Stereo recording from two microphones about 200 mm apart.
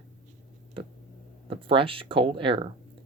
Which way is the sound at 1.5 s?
25° right (ahead or behind).